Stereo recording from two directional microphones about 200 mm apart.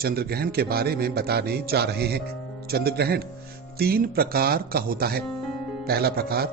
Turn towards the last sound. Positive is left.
turn(degrees=-50)  # may be behind; listen again after turning